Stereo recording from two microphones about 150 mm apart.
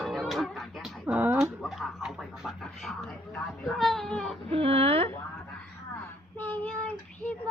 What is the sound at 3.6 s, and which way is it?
Cat, centre (ahead or behind).